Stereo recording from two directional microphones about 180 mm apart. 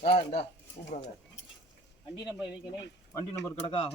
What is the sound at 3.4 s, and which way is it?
Speech, 30° left (ahead or behind).